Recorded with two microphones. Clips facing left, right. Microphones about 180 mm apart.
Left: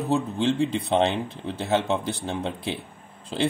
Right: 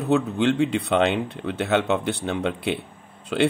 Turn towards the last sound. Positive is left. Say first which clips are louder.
# right 5 dB
turn(degrees=-65)  # may be behind; listen again after turning